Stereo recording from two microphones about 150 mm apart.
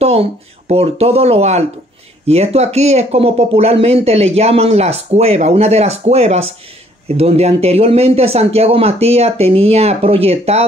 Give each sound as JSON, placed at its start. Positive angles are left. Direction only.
{"t": 0.0, "sound": "speech", "side_deg": -40}